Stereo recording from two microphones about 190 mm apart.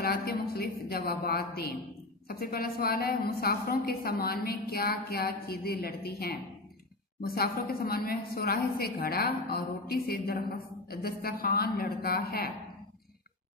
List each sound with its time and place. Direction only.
0.0 s a woman's voice: 55° left (ahead or behind)